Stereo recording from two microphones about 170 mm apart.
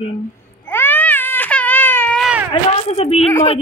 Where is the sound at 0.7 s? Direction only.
10° left (ahead or behind).